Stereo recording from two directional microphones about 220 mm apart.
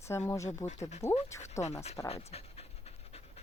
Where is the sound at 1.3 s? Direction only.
15° left (ahead or behind).